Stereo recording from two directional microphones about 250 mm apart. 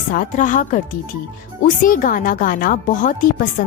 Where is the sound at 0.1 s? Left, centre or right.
Left.